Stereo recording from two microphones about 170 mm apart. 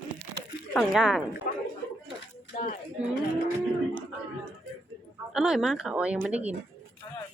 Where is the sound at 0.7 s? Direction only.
Centre (ahead or behind).